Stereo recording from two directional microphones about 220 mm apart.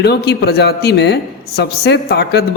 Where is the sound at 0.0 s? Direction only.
50° left (ahead or behind).